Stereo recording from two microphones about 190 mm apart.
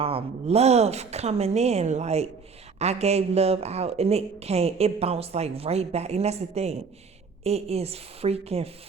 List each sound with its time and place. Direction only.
0.0 s speech: 30° right (ahead or behind)